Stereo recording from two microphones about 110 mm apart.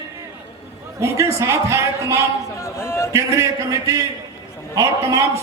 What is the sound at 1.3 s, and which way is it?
Speech, 25° right (ahead or behind).